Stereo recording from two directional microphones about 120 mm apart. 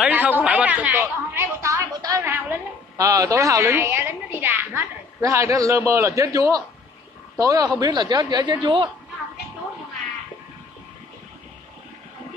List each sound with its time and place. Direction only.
0.0 s speech: 15° right (ahead or behind)
0.9 s a woman's voice: 25° right (ahead or behind); by 8.9 s 40° right (ahead or behind)